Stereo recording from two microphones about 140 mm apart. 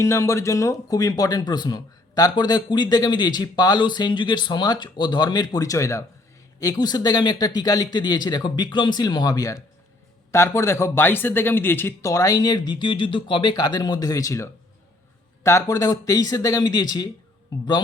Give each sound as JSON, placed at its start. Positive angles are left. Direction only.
{"t": 0.0, "sound": "speech", "side_deg": 20}